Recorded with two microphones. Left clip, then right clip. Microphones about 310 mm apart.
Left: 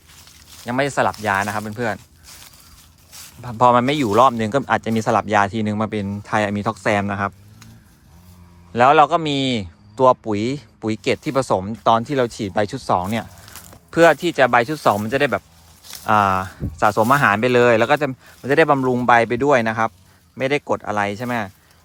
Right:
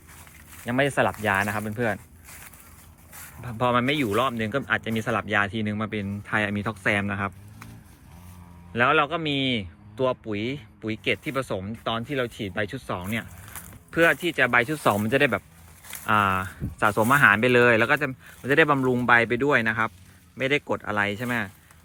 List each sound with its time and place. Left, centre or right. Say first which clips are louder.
0.5 s speech: left 3 dB; centre
3.1 s speech: left 5 dB; centre
8.7 s speech: left 9 dB; centre